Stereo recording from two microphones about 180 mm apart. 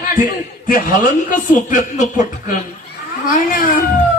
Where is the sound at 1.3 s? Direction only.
45° left (ahead or behind).